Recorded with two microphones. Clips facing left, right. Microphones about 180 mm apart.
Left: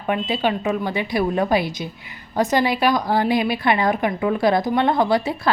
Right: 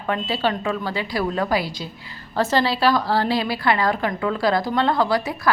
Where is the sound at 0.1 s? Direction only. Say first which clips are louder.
Left 2 dB; 15° left (ahead or behind).